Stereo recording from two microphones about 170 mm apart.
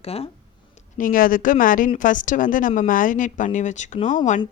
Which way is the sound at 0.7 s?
55° left (ahead or behind).